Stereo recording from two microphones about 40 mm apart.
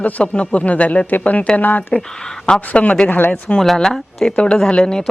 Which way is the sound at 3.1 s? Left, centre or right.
Left.